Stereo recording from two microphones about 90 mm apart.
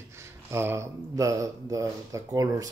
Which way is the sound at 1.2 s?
40° right (ahead or behind).